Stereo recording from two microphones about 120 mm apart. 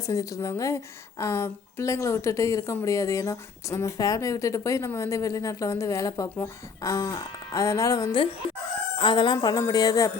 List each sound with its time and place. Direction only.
0.1 s speech: 25° left (ahead or behind)
9.0 s chicken: 40° left (ahead or behind)
9.6 s speech: 30° left (ahead or behind)